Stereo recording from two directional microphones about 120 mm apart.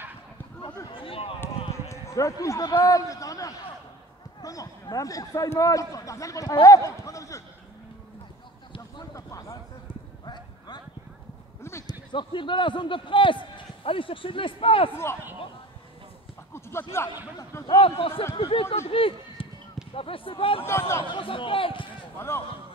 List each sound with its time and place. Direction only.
0.8 s a sound: 50° left (ahead or behind)
1.9 s a man's voice: 25° left (ahead or behind)
6.6 s a sound: 25° left (ahead or behind)
9.1 s a sound: 25° left (ahead or behind)
10.2 s clip-clop: 35° left (ahead or behind)
11.9 s a man's voice: 40° left (ahead or behind)
14.9 s a man's voice: 20° left (ahead or behind)
17.6 s speech: 50° left (ahead or behind)
20.6 s a man's voice: 20° left (ahead or behind)
21.0 s speech: 45° left (ahead or behind)
22.2 s a man's voice: 20° left (ahead or behind)